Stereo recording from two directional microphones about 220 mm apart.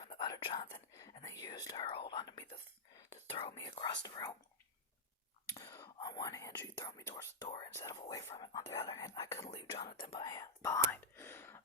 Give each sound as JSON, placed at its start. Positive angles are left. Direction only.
{"t": 0.0, "sound": "whispering", "side_deg": 25}
{"t": 3.2, "sound": "speech", "side_deg": 25}
{"t": 5.5, "sound": "speech", "side_deg": 20}
{"t": 10.1, "sound": "whispering", "side_deg": 20}